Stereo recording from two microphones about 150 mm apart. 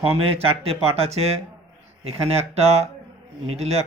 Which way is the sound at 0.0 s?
40° right (ahead or behind).